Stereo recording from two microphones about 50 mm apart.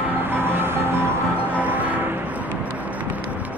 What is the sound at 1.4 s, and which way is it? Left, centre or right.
Music, right.